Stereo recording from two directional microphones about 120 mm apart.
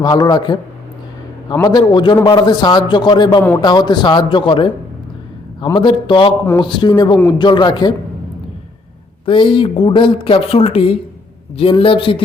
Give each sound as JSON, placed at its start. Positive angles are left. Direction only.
{"t": 0.0, "sound": "a man's voice", "side_deg": 35}
{"t": 1.6, "sound": "a man's voice", "side_deg": 35}
{"t": 5.7, "sound": "a man's voice", "side_deg": 40}
{"t": 9.2, "sound": "a woman's voice", "side_deg": 45}